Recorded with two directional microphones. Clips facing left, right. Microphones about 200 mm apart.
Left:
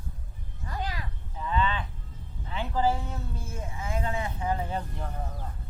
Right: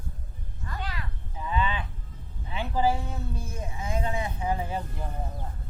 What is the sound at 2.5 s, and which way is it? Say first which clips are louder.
Speech: right 1 dB; 10° right (ahead or behind).